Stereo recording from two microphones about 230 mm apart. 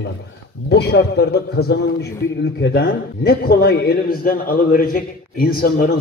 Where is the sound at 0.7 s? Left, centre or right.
Left.